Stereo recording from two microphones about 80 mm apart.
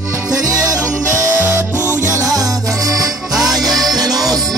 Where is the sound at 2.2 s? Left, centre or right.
Right.